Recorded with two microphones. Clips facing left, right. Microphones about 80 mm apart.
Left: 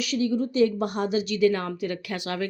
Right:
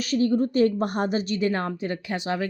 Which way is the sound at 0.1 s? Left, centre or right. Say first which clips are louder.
Right 4 dB; right.